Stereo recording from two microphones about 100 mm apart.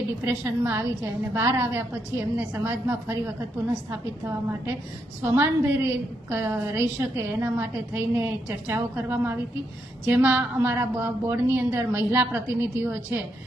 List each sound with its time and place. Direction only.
0.6 s a woman's voice: 25° right (ahead or behind)
5.2 s a woman's voice: 25° right (ahead or behind)